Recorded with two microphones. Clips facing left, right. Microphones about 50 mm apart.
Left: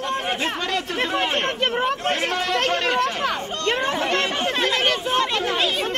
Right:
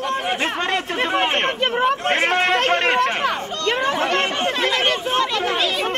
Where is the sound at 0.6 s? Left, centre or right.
Right.